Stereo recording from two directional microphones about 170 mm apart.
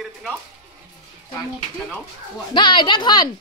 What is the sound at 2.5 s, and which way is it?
Speech, 30° left (ahead or behind).